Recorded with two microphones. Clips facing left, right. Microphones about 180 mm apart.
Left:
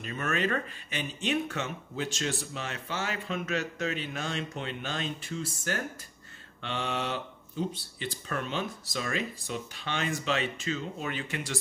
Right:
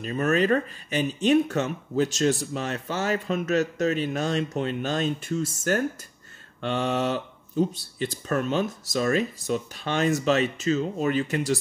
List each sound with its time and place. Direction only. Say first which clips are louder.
0.0 s speech: right 8 dB; 35° right (ahead or behind)